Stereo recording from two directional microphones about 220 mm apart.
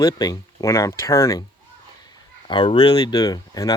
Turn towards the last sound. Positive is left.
turn(degrees=15)  # may be behind; listen again after turning